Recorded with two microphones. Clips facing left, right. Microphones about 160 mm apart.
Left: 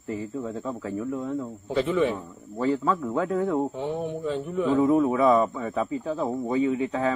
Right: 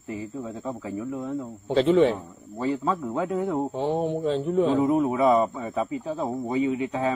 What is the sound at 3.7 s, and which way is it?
Speech, 30° right (ahead or behind).